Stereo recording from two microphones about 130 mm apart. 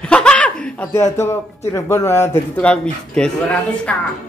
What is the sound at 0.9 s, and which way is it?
A man's voice, 20° left (ahead or behind).